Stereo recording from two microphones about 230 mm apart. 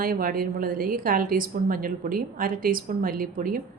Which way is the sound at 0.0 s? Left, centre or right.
Right.